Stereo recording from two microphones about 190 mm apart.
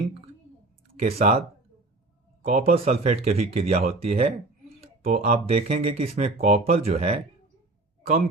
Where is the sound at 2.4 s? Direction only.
50° right (ahead or behind).